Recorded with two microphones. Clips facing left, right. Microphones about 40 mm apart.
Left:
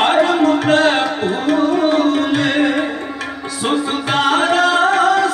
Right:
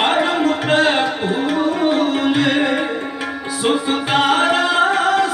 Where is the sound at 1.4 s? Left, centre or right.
Centre.